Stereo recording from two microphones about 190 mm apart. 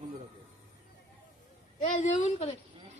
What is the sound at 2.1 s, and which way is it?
Speech, 35° left (ahead or behind).